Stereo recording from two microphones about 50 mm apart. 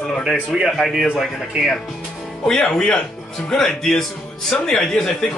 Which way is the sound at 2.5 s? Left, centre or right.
Centre.